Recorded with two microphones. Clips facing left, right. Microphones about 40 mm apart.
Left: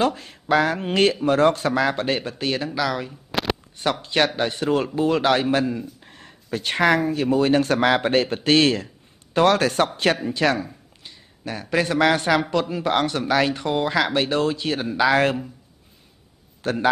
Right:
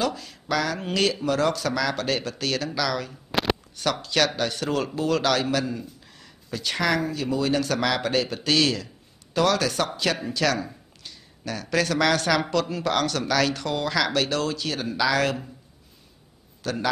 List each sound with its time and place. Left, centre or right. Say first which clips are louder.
0.0 s speech: left 5 dB; left
3.1 s a sound: even; centre
3.7 s speech: left 5 dB; left
10.2 s speech: left 3 dB; left
16.6 s speech: left 4 dB; left